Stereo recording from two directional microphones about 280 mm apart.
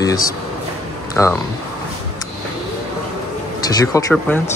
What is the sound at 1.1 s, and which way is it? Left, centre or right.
Speech, centre.